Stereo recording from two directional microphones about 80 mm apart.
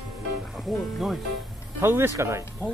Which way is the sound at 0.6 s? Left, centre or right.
Centre.